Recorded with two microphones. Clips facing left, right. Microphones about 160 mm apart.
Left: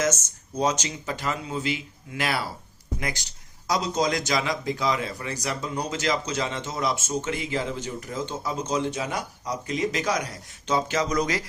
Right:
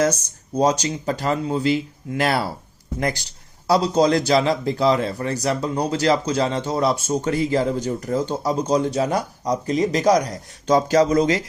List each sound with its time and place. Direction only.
0.0 s a man's voice: 35° right (ahead or behind)